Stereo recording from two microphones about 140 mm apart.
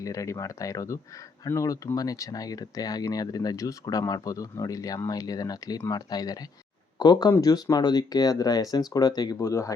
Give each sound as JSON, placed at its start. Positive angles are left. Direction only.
{"t": 0.0, "sound": "speech", "side_deg": 25}